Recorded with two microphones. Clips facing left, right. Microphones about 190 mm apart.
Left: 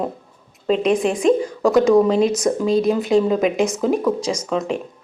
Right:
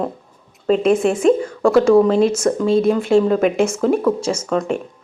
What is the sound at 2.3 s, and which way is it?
Speech, 15° left (ahead or behind).